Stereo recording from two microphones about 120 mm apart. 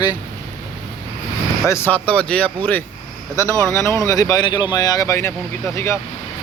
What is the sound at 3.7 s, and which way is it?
Speech, 25° left (ahead or behind).